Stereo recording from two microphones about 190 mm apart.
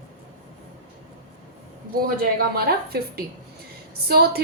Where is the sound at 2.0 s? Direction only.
55° right (ahead or behind).